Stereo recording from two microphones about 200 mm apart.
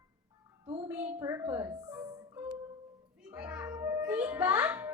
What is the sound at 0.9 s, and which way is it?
A woman's voice, 10° right (ahead or behind).